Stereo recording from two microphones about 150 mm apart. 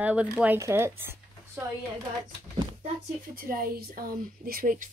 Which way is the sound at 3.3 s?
75° right (ahead or behind).